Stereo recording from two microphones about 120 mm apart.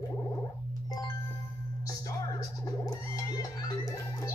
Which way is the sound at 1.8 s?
30° left (ahead or behind).